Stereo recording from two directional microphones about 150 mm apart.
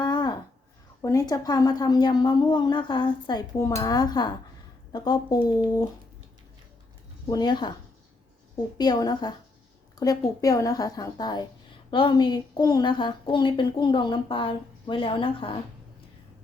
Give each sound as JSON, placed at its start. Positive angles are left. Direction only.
{"t": 0.0, "sound": "a sound", "side_deg": 30}
{"t": 1.0, "sound": "speech", "side_deg": 25}
{"t": 7.3, "sound": "speech", "side_deg": 30}
{"t": 8.8, "sound": "a woman's voice", "side_deg": 25}